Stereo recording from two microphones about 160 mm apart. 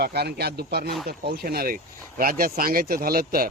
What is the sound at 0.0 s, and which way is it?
A man's voice, 90° right.